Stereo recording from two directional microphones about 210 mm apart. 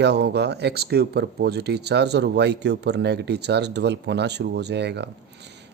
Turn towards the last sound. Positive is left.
turn(degrees=-55)  # may be behind; listen again after turning